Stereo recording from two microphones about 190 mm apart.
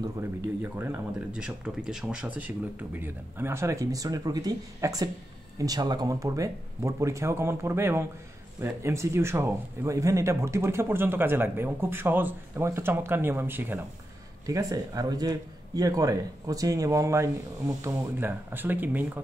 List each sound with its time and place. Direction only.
0.0 s speech: 10° right (ahead or behind)